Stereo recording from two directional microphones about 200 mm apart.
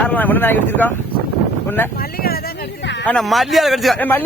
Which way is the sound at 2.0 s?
50° left (ahead or behind).